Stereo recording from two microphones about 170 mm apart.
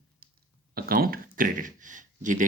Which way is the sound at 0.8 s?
60° right (ahead or behind).